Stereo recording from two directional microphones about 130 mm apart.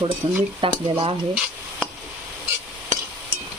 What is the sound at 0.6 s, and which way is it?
Speech, 40° right (ahead or behind).